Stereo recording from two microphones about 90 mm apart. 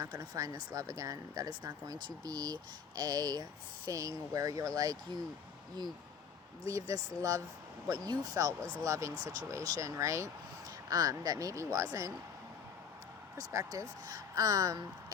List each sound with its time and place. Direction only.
0.0 s speech: 45° right (ahead or behind)
6.7 s speech: 35° right (ahead or behind)
13.3 s speech: 40° right (ahead or behind)